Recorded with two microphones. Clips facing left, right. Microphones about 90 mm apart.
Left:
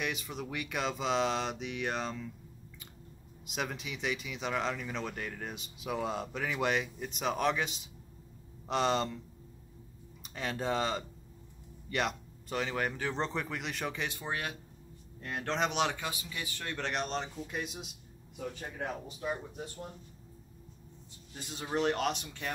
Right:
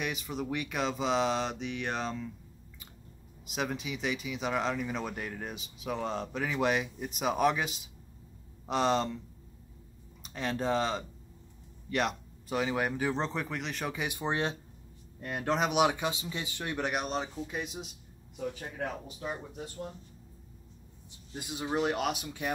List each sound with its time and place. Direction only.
0.0 s speech: centre (ahead or behind)
3.4 s speech: centre (ahead or behind)
10.2 s speech: centre (ahead or behind)
14.0 s speech: 20° right (ahead or behind)
15.1 s speech: 10° right (ahead or behind)
21.4 s speech: 10° right (ahead or behind)